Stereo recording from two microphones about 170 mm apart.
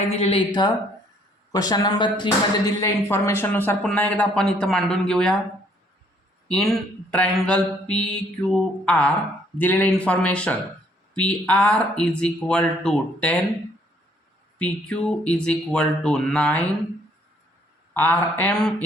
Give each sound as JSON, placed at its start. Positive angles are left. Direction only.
{"t": 0.1, "sound": "a woman's voice", "side_deg": 35}
{"t": 3.8, "sound": "mantra", "side_deg": 10}
{"t": 6.5, "sound": "mantra", "side_deg": 0}
{"t": 9.6, "sound": "speech", "side_deg": 10}
{"t": 14.6, "sound": "mantra", "side_deg": 5}
{"t": 17.9, "sound": "speech", "side_deg": 10}